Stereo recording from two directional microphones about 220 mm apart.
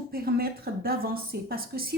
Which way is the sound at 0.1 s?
45° right (ahead or behind).